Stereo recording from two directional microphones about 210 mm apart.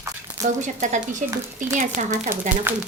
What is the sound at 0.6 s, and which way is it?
Speech, 35° right (ahead or behind).